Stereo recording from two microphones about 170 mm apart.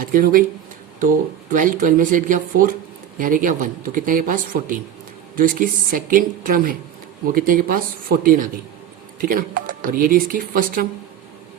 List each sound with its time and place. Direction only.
0.1 s speech: 55° right (ahead or behind)
1.5 s speech: 50° right (ahead or behind)